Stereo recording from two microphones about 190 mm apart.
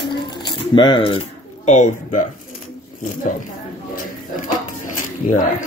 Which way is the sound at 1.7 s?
40° left (ahead or behind).